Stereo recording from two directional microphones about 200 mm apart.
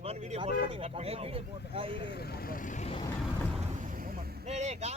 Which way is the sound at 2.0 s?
55° left (ahead or behind).